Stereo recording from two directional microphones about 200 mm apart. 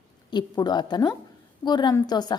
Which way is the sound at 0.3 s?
20° left (ahead or behind).